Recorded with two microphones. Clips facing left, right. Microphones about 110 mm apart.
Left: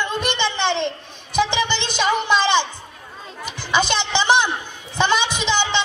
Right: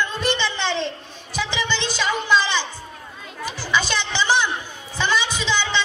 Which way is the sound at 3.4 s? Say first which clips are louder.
Left 2 dB; 20° left (ahead or behind).